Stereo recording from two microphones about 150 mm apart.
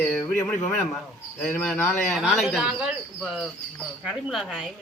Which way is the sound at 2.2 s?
5° right (ahead or behind).